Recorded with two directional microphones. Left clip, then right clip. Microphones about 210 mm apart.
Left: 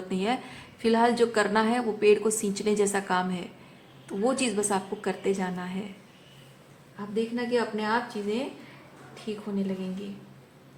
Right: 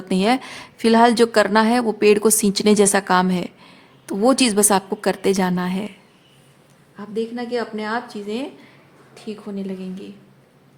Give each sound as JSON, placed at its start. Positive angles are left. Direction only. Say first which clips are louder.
{"t": 0.1, "sound": "a woman's voice", "louder": "right 11 dB", "side_deg": -55}
{"t": 7.1, "sound": "a woman's voice", "louder": "right 3 dB", "side_deg": -45}